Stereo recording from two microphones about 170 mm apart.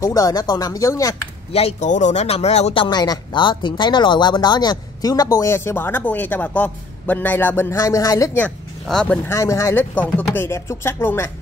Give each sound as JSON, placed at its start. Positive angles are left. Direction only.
{"t": 0.0, "sound": "speech", "side_deg": 20}
{"t": 1.5, "sound": "speech", "side_deg": 35}
{"t": 8.5, "sound": "speech", "side_deg": 5}
{"t": 9.3, "sound": "chopping", "side_deg": 15}